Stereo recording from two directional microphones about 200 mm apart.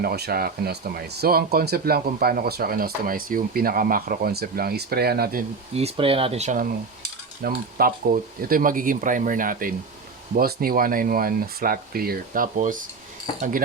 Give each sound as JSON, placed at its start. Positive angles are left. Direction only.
{"t": 0.0, "sound": "speech", "side_deg": -50}
{"t": 5.7, "sound": "speech", "side_deg": -30}
{"t": 7.4, "sound": "speech", "side_deg": -45}